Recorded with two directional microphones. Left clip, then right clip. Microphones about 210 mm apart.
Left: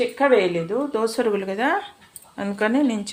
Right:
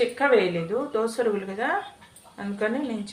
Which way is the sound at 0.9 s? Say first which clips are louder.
Left 3 dB; 45° left (ahead or behind).